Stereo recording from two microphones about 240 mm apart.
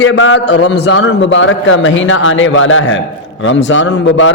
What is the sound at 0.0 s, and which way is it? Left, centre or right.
A man's voice, left.